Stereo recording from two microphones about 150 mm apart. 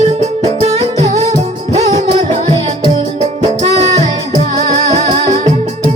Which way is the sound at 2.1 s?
35° right (ahead or behind).